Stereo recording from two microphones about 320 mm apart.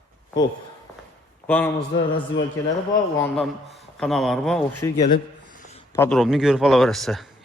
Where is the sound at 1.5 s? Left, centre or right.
Centre.